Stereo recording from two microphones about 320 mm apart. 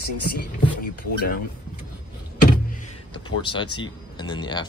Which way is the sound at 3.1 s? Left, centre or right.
Centre.